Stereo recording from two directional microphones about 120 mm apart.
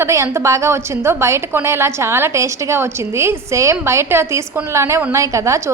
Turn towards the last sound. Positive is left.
turn(degrees=-25)  # may be behind; listen again after turning